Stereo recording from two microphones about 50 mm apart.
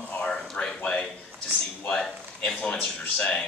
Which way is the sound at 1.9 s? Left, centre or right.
Centre.